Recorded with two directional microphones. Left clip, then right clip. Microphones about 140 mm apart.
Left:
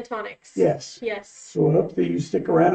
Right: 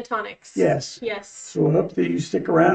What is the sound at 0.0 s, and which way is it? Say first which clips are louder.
Speech: right 4 dB; 15° left (ahead or behind).